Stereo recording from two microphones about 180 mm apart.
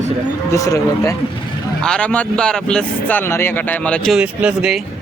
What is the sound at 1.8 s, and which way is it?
Speech, 5° left (ahead or behind).